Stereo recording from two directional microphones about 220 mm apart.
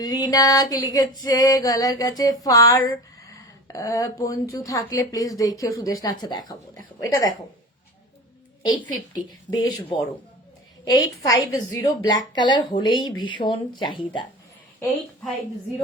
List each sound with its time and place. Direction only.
0.0 s female singing: 20° left (ahead or behind)
9.1 s a woman's voice: 20° left (ahead or behind)